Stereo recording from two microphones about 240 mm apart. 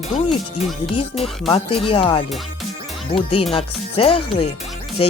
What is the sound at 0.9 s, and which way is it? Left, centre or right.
Speech, left.